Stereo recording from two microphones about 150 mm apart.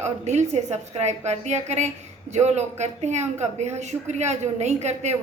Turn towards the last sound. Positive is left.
turn(degrees=-50)  # may be behind; listen again after turning